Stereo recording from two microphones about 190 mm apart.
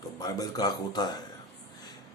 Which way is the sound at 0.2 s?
20° left (ahead or behind).